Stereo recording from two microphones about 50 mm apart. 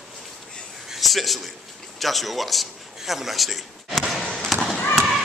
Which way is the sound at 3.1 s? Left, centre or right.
Centre.